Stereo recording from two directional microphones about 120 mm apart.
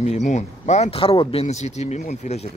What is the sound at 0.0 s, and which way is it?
Speech, 75° left (ahead or behind).